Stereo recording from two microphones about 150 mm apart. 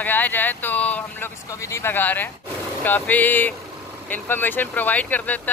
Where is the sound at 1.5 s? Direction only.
20° left (ahead or behind).